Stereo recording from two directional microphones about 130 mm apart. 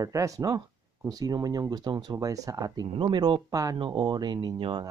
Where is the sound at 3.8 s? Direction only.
35° right (ahead or behind).